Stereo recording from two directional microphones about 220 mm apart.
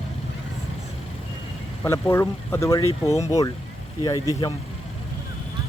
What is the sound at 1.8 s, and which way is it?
Speech, 10° left (ahead or behind).